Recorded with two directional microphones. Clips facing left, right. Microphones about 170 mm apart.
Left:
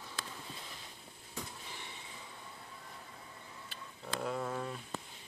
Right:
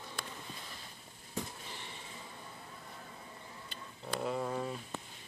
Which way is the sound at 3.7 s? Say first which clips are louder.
Right 2 dB; centre (ahead or behind).